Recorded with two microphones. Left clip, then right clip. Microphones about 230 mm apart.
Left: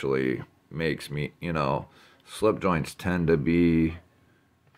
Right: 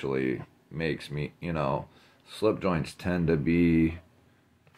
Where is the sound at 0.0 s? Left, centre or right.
Left.